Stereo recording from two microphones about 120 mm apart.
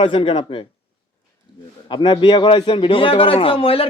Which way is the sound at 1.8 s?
40° left (ahead or behind).